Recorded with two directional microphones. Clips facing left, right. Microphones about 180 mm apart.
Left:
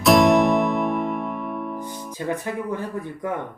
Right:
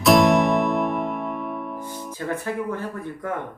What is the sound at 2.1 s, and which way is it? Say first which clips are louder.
Speech: left 1 dB; 15° left (ahead or behind).